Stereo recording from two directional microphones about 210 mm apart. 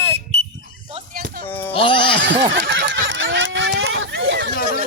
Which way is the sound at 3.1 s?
65° right (ahead or behind).